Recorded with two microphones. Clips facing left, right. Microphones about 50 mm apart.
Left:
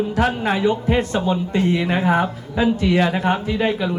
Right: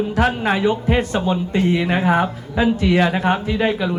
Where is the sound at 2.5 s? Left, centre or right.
Right.